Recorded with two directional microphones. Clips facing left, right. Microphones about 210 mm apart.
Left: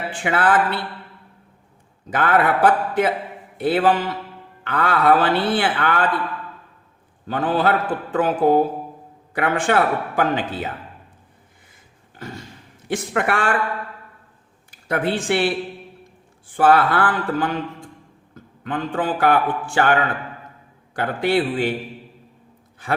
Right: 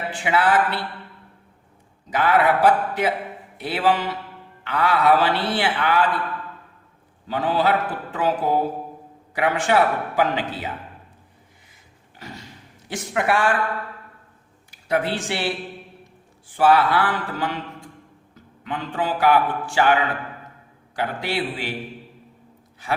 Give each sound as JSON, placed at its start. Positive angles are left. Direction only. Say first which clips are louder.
{"t": 0.2, "sound": "a man's voice", "louder": "left 1 dB", "side_deg": 55}
{"t": 2.0, "sound": "a man's voice", "louder": "even", "side_deg": 55}
{"t": 7.3, "sound": "a man's voice", "louder": "left 1 dB", "side_deg": 55}
{"t": 12.9, "sound": "speech", "louder": "left 1 dB", "side_deg": 55}
{"t": 14.7, "sound": "speech", "louder": "left 1 dB", "side_deg": 55}
{"t": 16.6, "sound": "a man's voice", "louder": "left 1 dB", "side_deg": 50}